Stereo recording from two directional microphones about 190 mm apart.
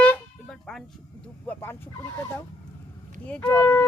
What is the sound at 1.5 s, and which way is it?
Vehicle, 10° left (ahead or behind).